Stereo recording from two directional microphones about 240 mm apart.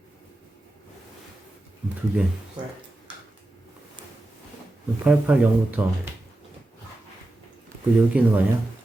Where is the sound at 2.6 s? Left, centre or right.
Centre.